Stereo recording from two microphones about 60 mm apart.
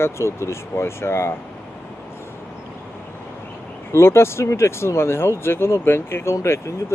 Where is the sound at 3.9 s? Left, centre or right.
Left.